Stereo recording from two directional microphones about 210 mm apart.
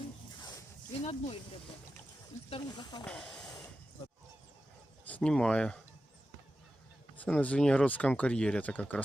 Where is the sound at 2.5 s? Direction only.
20° left (ahead or behind).